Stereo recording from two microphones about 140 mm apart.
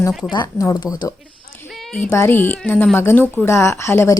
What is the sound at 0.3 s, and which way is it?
Speech, 30° left (ahead or behind).